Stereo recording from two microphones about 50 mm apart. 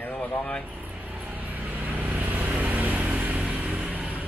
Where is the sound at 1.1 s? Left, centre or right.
Right.